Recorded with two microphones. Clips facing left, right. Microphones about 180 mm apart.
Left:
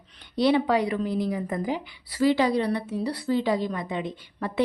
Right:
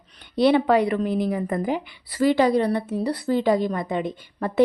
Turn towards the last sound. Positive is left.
turn(degrees=-45)  # may be behind; listen again after turning